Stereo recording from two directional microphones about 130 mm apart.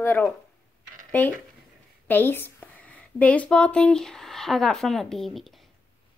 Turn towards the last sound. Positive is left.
turn(degrees=0)  # may be behind; listen again after turning